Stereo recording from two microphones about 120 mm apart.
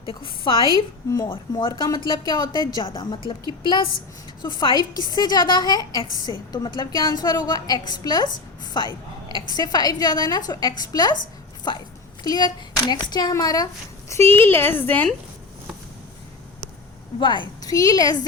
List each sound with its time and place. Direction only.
0.1 s a woman's voice: 45° left (ahead or behind)
4.4 s a woman's voice: 40° left (ahead or behind)
14.3 s a woman's voice: 20° left (ahead or behind)
17.2 s a woman's voice: 40° left (ahead or behind)
17.7 s a woman's voice: 30° left (ahead or behind)